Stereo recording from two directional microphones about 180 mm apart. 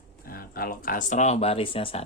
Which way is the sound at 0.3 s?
55° left (ahead or behind).